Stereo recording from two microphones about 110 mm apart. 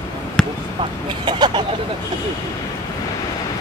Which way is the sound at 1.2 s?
40° right (ahead or behind).